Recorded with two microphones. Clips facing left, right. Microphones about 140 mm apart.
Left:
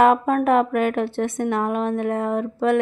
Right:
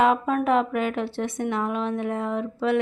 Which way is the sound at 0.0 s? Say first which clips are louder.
Left 4 dB; 55° left (ahead or behind).